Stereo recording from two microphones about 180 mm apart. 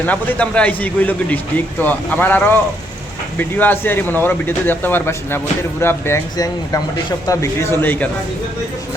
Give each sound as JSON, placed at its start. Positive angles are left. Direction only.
{"t": 0.0, "sound": "a man's voice", "side_deg": 10}